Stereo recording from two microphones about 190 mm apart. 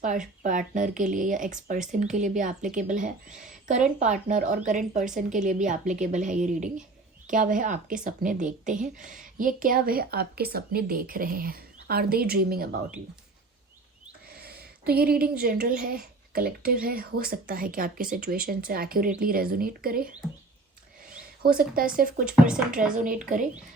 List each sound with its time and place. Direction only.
0.0 s a woman's voice: 40° right (ahead or behind)
14.4 s a woman's voice: 55° right (ahead or behind)
21.4 s a woman's voice: 50° right (ahead or behind)
22.2 s speech: 5° right (ahead or behind)
23.0 s a woman's voice: 45° right (ahead or behind)